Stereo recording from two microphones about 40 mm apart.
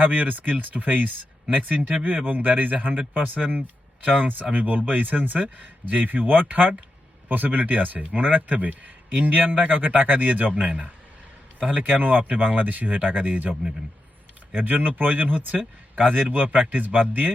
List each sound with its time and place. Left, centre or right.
0.0 s speech: right
11.6 s speech: right
14.6 s speech: right